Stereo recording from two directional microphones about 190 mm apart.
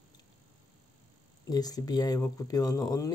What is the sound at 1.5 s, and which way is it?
Speech, 20° left (ahead or behind).